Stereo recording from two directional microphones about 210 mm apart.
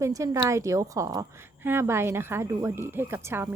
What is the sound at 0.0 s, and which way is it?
A woman's voice, 15° right (ahead or behind).